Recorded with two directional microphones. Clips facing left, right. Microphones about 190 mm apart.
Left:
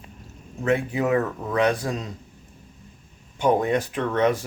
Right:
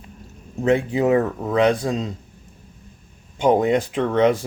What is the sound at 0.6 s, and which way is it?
Speech, 25° right (ahead or behind).